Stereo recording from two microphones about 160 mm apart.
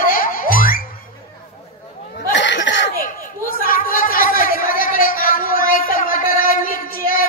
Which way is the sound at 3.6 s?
60° left (ahead or behind).